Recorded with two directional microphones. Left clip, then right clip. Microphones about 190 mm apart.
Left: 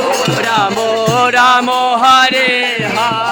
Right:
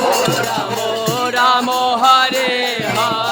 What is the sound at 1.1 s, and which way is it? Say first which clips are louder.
Music: left 5 dB; 5° left (ahead or behind).